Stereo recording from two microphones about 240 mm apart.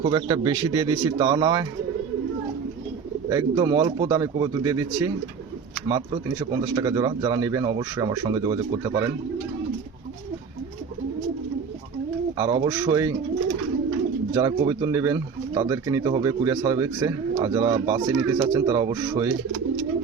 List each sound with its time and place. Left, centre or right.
0.0 s speech: centre
3.2 s speech: centre
6.5 s speech: centre
12.4 s speech: centre
14.3 s speech: centre